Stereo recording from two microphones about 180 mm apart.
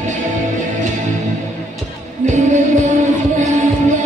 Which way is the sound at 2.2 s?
40° right (ahead or behind).